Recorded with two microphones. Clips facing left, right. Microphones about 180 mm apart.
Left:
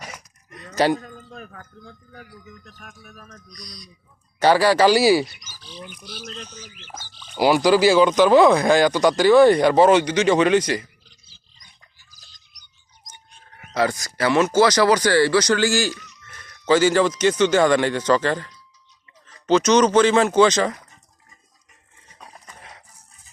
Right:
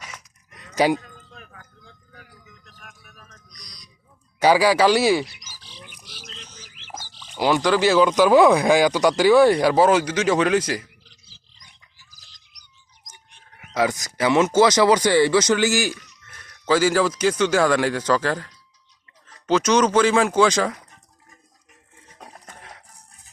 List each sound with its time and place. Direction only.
0.9 s speech: 45° left (ahead or behind)
4.4 s speech: 10° right (ahead or behind)
5.2 s speech: 90° right
6.2 s speech: 55° left (ahead or behind)
7.3 s speech: 10° left (ahead or behind)
11.1 s a sound: 80° right
13.7 s speech: 15° right (ahead or behind)
16.2 s speech: centre (ahead or behind)